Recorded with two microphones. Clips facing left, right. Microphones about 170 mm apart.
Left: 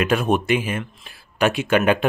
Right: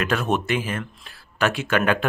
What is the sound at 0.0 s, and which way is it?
Speech, 15° left (ahead or behind).